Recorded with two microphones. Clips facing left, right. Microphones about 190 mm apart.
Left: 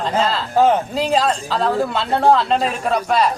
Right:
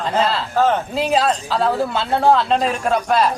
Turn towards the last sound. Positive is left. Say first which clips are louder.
# even
turn(degrees=0)  # may be behind; listen again after turning